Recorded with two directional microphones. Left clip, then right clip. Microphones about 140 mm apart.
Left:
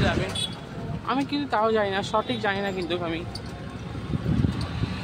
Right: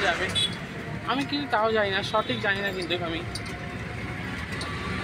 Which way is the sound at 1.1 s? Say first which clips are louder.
Left 1 dB; 35° left (ahead or behind).